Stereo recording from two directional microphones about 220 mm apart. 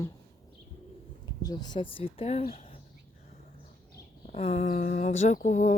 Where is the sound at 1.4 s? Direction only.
20° left (ahead or behind).